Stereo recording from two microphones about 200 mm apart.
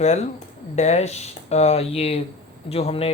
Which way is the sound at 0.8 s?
35° left (ahead or behind).